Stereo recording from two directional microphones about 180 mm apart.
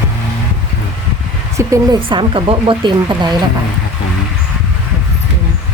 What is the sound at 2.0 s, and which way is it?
Speech, 30° right (ahead or behind).